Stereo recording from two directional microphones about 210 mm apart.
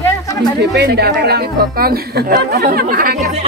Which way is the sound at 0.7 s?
50° right (ahead or behind).